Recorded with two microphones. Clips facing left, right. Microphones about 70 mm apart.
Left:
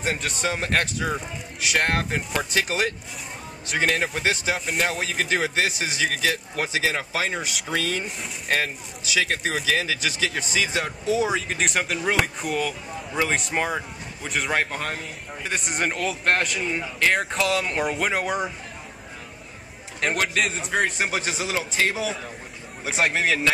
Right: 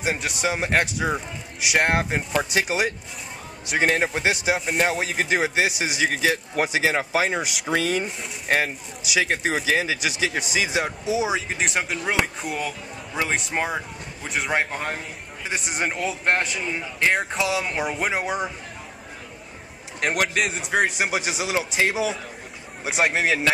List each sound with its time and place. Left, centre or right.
0.0 s speech: centre
14.5 s speech: centre
15.4 s a man's voice: centre
20.0 s speech: centre